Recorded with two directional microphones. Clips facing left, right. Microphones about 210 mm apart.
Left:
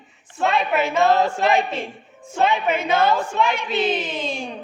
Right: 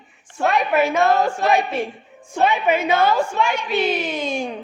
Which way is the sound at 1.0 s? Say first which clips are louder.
Even; 20° left (ahead or behind).